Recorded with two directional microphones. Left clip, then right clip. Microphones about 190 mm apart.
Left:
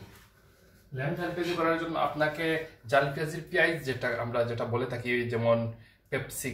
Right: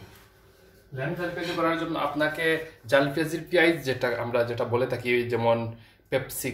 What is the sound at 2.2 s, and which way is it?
Speech, 45° right (ahead or behind).